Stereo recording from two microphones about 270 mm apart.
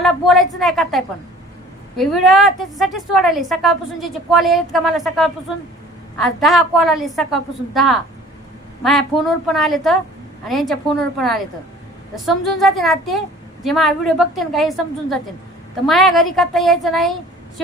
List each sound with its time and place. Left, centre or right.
0.0 s a woman's voice: centre
15.9 s a woman's voice: centre